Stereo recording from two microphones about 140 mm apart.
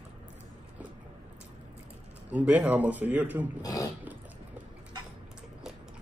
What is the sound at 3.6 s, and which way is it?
Speech, 25° left (ahead or behind).